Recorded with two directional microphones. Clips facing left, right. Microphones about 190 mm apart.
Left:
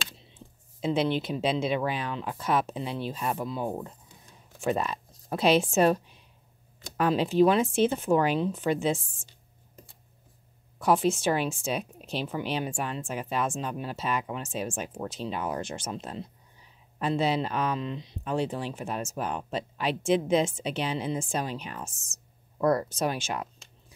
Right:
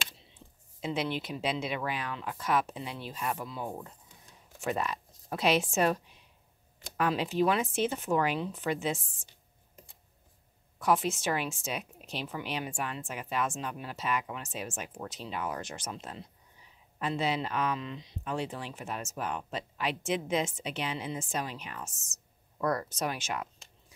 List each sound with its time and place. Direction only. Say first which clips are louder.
0.7 s speech: left 6 dB; 25° left (ahead or behind)
7.0 s speech: left 6 dB; 30° left (ahead or behind)
10.8 s speech: left 4 dB; 30° left (ahead or behind)